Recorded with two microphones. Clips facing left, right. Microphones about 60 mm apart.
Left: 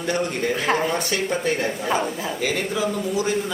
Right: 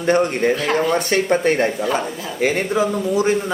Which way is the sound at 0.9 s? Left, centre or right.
Right.